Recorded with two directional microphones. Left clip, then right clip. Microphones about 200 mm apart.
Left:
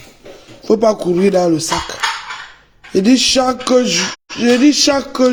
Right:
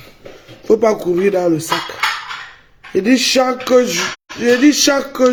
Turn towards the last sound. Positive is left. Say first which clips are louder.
# left 1 dB
turn(degrees=25)  # may be behind; listen again after turning